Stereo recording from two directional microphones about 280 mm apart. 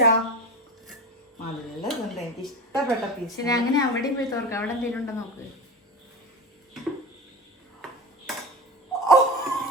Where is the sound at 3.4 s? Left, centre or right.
Centre.